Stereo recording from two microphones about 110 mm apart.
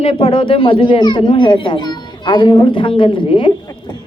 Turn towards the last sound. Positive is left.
turn(degrees=50)  # may be behind; listen again after turning